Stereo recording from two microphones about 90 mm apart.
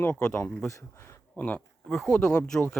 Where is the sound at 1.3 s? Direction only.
15° left (ahead or behind).